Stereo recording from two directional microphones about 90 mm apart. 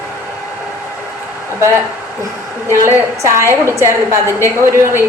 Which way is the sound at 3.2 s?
35° right (ahead or behind).